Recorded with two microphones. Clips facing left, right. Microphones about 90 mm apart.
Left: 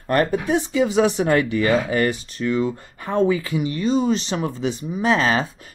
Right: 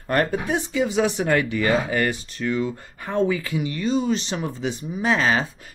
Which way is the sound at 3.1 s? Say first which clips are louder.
Left 3 dB; 30° left (ahead or behind).